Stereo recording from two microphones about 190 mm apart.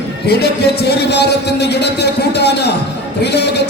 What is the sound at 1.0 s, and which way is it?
Speech, 60° left (ahead or behind).